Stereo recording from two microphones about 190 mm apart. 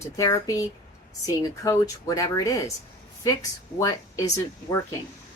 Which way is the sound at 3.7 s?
15° left (ahead or behind).